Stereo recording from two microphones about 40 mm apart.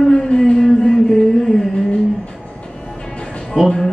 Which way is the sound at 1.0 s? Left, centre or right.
Centre.